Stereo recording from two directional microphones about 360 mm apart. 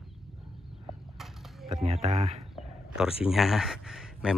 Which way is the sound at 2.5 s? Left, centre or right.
Centre.